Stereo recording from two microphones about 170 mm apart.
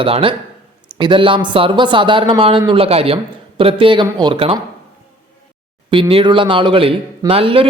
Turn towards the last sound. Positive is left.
turn(degrees=-30)  # may be behind; listen again after turning